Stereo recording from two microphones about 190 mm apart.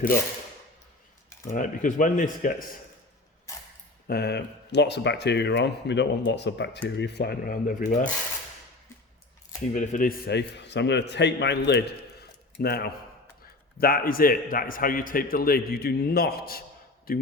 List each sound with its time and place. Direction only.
1.5 s a man's voice: 45° left (ahead or behind)
4.0 s speech: 55° left (ahead or behind)
9.7 s speech: 40° left (ahead or behind); by 11.8 s 65° left (ahead or behind)
12.2 s a sound: 60° left (ahead or behind)
13.7 s a man's voice: 50° left (ahead or behind)